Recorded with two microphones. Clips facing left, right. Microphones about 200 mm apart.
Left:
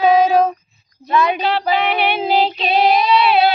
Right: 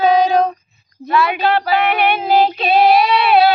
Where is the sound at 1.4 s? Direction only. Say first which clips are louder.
Right 2 dB; 50° right (ahead or behind).